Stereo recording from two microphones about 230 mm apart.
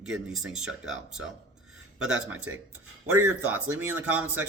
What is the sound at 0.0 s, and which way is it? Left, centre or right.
Speech, centre.